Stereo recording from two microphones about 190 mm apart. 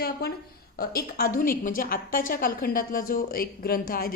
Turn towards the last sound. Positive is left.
turn(degrees=50)  # may be behind; listen again after turning